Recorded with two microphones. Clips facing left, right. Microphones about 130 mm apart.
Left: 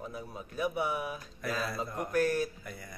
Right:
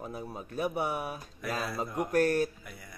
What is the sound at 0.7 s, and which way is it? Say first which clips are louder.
Speech: right 1 dB; 55° right (ahead or behind).